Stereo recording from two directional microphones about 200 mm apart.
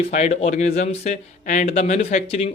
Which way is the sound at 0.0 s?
35° left (ahead or behind).